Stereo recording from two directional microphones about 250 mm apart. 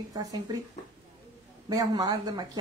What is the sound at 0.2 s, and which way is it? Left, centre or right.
Speech, centre.